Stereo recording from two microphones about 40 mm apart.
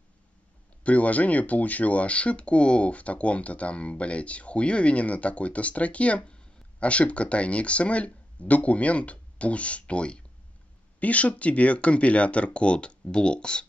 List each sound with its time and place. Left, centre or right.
0.8 s speech: left